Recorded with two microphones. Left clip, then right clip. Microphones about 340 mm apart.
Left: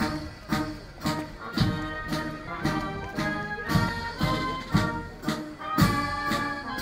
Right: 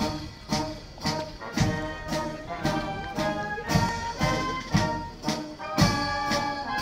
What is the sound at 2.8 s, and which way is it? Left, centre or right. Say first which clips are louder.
Music: right 2 dB; right.